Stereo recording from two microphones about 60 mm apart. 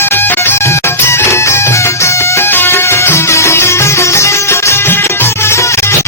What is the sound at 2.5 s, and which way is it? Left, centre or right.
Music, left.